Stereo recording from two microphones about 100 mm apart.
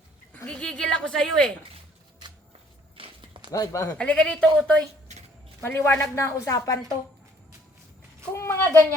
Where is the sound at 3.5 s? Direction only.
35° left (ahead or behind).